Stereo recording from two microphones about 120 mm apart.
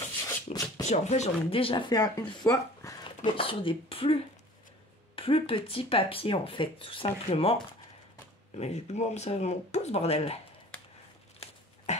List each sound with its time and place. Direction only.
0.5 s a sound: 65° left (ahead or behind)
0.8 s speech: 70° left (ahead or behind)
1.5 s speech: 50° left (ahead or behind)
1.9 s speech: 30° left (ahead or behind)
2.5 s a sound: 30° left (ahead or behind)
3.3 s speech: 45° left (ahead or behind)
8.5 s speech: 65° left (ahead or behind)
11.3 s dog: 70° left (ahead or behind)